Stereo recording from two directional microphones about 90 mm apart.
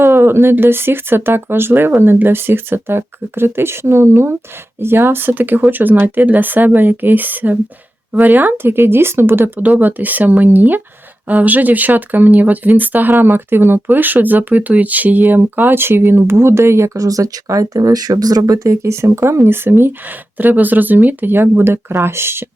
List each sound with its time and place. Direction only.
0.0 s speech: 25° right (ahead or behind)